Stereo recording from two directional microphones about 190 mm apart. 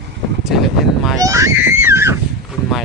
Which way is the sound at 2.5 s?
Centre (ahead or behind).